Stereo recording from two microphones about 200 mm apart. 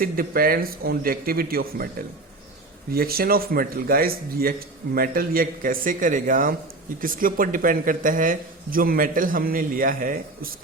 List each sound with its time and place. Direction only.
0.0 s speech: 45° right (ahead or behind)